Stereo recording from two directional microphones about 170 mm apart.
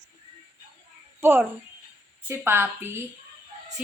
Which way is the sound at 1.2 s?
10° right (ahead or behind).